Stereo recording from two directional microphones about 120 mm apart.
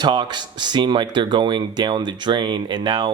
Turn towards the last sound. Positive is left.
turn(degrees=-40)  # may be behind; listen again after turning